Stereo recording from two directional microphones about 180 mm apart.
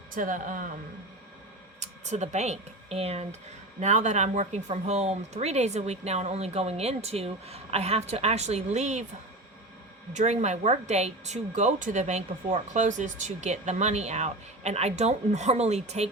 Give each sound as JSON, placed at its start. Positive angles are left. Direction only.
{"t": 0.1, "sound": "speech", "side_deg": -45}
{"t": 1.8, "sound": "speech", "side_deg": -40}
{"t": 10.1, "sound": "speech", "side_deg": -40}